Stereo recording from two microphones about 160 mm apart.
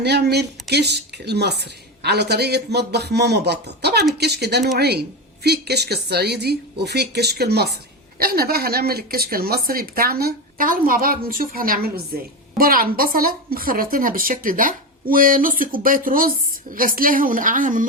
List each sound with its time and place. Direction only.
0.0 s a woman's voice: 90° right
8.2 s speech: 70° right (ahead or behind); by 17.8 s 55° right (ahead or behind)